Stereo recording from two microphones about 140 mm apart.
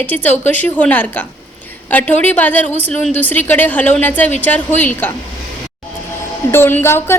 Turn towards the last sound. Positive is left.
turn(degrees=15)  # may be behind; listen again after turning